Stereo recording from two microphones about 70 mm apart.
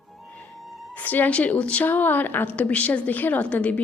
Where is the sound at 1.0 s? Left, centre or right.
Left.